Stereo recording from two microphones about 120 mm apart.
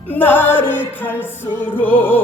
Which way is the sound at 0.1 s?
15° left (ahead or behind).